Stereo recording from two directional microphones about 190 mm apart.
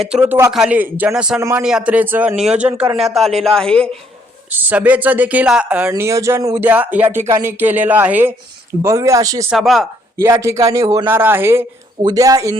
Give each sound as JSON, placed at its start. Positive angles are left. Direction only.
{"t": 0.0, "sound": "a man's voice", "side_deg": -5}
{"t": 4.4, "sound": "speech", "side_deg": -10}
{"t": 9.5, "sound": "a man's voice", "side_deg": 0}
{"t": 10.2, "sound": "speech", "side_deg": -15}